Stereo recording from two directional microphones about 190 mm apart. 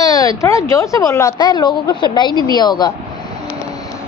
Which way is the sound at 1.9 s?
25° left (ahead or behind).